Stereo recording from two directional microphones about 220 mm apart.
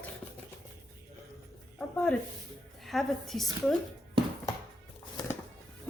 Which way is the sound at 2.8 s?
Centre (ahead or behind).